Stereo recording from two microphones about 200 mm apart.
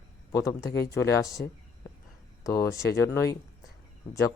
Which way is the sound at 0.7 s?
55° left (ahead or behind).